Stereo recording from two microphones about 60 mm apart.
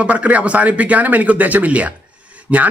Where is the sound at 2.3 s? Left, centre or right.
Right.